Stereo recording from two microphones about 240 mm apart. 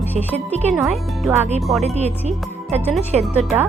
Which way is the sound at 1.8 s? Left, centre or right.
Right.